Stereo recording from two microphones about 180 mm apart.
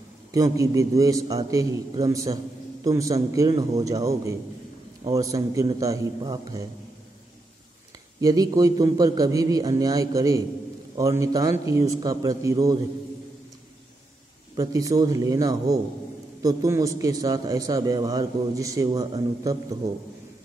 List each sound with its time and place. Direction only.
0.3 s a man's voice: 20° right (ahead or behind)
8.2 s a man's voice: 20° right (ahead or behind)
14.5 s a man's voice: 20° right (ahead or behind)